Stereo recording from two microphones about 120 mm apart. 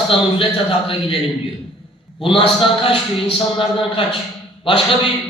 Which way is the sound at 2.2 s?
45° left (ahead or behind).